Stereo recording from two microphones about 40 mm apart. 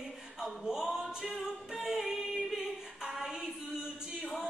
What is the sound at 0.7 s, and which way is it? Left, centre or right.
Music, centre.